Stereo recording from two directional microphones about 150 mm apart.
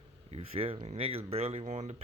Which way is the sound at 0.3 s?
40° right (ahead or behind).